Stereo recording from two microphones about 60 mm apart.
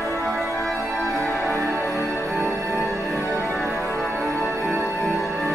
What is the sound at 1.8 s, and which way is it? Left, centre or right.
Music, left.